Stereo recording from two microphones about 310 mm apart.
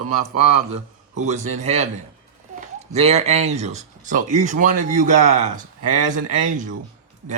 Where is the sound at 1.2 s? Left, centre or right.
Right.